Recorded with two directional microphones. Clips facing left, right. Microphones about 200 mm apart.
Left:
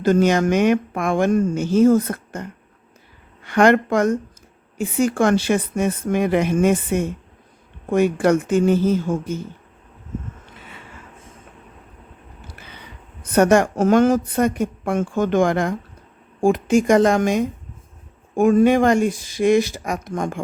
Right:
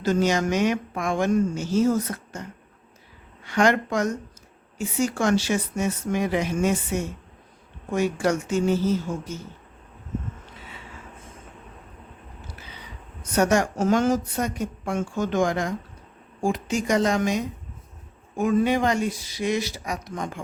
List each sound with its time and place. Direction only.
0.0 s speech: 55° left (ahead or behind)
13.3 s speech: 55° left (ahead or behind)